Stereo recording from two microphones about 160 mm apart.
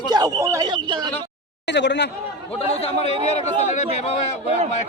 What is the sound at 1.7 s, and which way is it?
Speech, 90° left.